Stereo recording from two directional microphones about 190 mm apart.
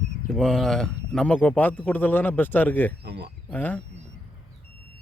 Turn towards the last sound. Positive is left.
turn(degrees=10)  # may be behind; listen again after turning